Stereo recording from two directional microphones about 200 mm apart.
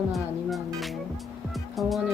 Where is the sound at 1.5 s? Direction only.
Centre (ahead or behind).